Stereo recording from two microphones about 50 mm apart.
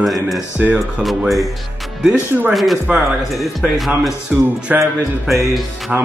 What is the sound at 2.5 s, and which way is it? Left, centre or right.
Speech, centre.